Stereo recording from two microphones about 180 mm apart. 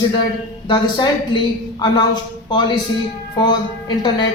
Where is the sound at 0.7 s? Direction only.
25° left (ahead or behind).